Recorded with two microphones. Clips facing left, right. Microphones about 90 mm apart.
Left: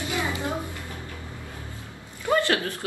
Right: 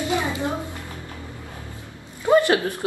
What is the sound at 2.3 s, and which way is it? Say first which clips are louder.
Speech: right 6 dB; 20° right (ahead or behind).